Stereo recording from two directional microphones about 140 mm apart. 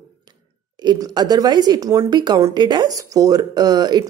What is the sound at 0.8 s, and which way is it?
A woman's voice, 30° right (ahead or behind).